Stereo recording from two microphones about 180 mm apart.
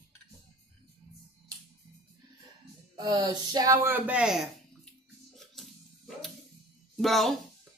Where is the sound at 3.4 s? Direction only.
20° right (ahead or behind); by 4.4 s 5° right (ahead or behind).